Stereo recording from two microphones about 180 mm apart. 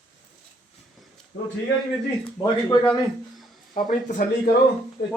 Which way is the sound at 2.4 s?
20° left (ahead or behind).